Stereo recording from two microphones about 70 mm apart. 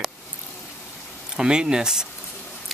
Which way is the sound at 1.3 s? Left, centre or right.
Centre.